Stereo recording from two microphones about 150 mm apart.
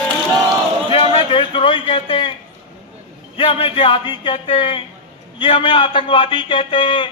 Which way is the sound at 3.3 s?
35° left (ahead or behind).